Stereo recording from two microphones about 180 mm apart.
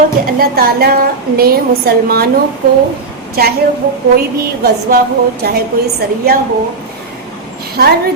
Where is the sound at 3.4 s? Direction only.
60° right (ahead or behind).